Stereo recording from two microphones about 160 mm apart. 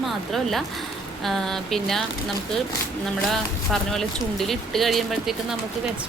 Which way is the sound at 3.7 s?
Centre (ahead or behind).